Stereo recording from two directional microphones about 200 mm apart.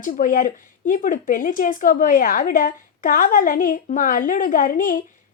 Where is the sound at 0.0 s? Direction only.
40° left (ahead or behind).